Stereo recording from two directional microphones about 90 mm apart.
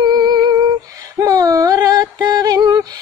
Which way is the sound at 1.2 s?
40° right (ahead or behind).